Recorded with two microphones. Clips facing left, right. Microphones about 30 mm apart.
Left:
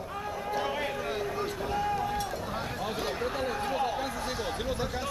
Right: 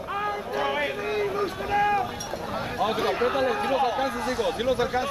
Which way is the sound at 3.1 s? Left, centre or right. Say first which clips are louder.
Right 8 dB; right.